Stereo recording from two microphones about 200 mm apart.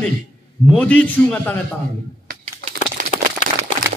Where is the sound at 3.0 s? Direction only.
35° right (ahead or behind).